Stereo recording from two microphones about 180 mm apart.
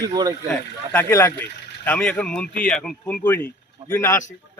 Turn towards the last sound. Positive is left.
turn(degrees=15)  # may be behind; listen again after turning